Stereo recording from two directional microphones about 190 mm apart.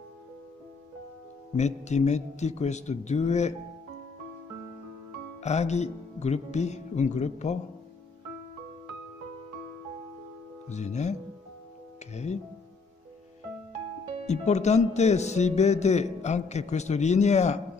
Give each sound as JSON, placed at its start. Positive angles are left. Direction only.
{"t": 1.6, "sound": "a man's voice", "side_deg": 35}
{"t": 5.4, "sound": "a man's voice", "side_deg": 35}
{"t": 10.7, "sound": "a man's voice", "side_deg": 35}
{"t": 14.2, "sound": "a man's voice", "side_deg": 35}